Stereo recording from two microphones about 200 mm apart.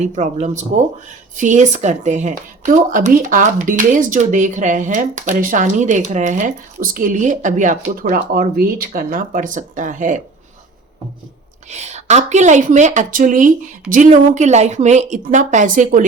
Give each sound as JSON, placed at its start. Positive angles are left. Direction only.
{"t": 0.0, "sound": "speech", "side_deg": -35}
{"t": 11.7, "sound": "speech", "side_deg": -35}